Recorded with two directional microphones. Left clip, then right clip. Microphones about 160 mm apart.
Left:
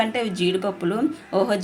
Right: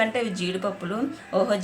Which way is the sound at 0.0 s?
25° left (ahead or behind).